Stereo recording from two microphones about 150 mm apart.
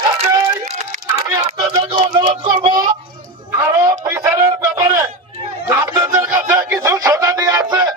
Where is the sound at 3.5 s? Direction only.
20° right (ahead or behind).